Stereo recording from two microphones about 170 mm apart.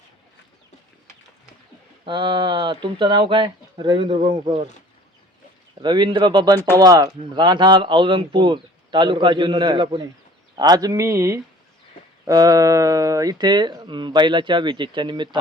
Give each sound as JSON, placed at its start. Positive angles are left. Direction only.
{"t": 2.0, "sound": "speech", "side_deg": -30}
{"t": 5.8, "sound": "speech", "side_deg": -25}